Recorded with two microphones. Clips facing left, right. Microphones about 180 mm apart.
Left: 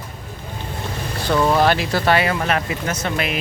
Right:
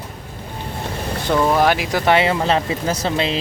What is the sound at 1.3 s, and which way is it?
Speech, 10° right (ahead or behind).